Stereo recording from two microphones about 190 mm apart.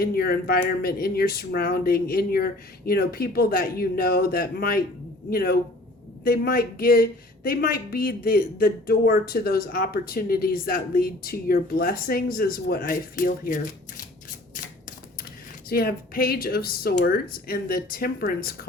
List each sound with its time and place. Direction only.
0.0 s speech: 55° left (ahead or behind)
15.7 s speech: 50° left (ahead or behind)